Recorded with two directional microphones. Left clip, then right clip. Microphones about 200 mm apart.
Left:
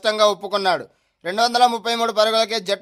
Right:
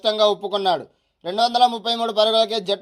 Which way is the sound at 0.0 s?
15° left (ahead or behind).